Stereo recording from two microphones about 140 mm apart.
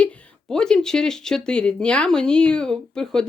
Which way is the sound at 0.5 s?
5° left (ahead or behind).